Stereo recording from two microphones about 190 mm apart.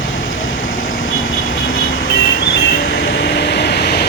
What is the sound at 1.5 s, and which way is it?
Vehicle, 50° left (ahead or behind).